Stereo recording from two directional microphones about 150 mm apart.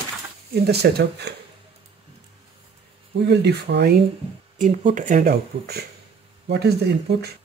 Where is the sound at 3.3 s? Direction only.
90° right.